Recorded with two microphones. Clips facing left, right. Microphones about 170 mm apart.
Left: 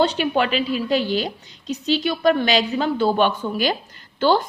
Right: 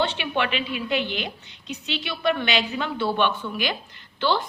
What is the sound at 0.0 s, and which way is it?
A woman's voice, 40° left (ahead or behind).